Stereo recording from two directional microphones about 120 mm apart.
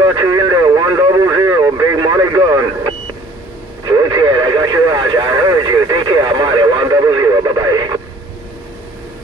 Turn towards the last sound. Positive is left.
turn(degrees=-30)  # may be behind; listen again after turning